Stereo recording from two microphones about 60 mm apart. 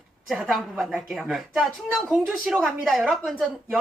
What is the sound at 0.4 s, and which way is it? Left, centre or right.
A man's voice, centre.